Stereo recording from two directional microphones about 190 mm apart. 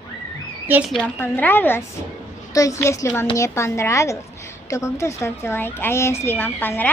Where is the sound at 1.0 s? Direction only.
10° left (ahead or behind).